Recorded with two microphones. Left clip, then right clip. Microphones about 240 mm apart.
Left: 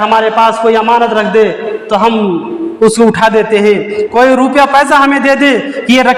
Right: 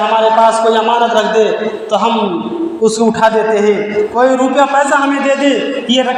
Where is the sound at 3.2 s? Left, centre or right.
Left.